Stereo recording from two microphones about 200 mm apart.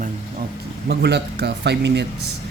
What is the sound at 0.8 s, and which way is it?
Speech, 55° right (ahead or behind).